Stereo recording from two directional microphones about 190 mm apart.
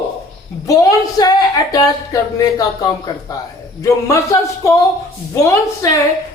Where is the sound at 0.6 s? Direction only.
15° left (ahead or behind).